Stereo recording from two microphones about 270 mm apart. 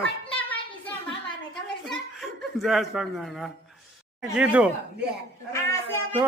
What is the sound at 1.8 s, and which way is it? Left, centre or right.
Chuckle, centre.